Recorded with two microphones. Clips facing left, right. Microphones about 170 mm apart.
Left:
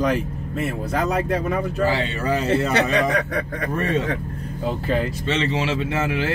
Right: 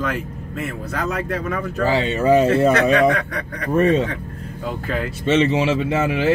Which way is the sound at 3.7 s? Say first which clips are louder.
Right 8 dB; 20° right (ahead or behind).